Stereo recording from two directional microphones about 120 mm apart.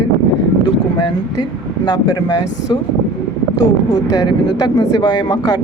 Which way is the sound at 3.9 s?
30° left (ahead or behind).